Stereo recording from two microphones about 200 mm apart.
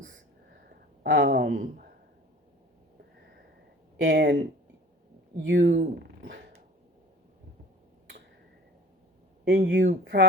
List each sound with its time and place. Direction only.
0.7 s a sound: 55° right (ahead or behind)
4.0 s speech: 60° right (ahead or behind)
5.7 s speech: 45° right (ahead or behind)
9.4 s speech: 65° right (ahead or behind)